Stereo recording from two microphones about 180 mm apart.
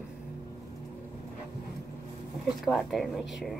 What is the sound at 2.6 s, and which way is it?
Speech, centre (ahead or behind).